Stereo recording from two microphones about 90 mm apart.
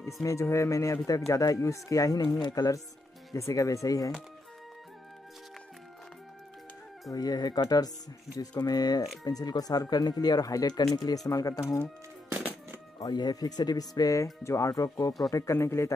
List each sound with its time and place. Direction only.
0.0 s speech: 35° left (ahead or behind)
7.1 s speech: 45° left (ahead or behind)
13.0 s speech: 50° left (ahead or behind); by 15.9 s 30° left (ahead or behind)